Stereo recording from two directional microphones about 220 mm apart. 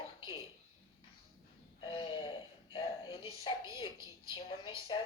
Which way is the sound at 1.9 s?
25° left (ahead or behind).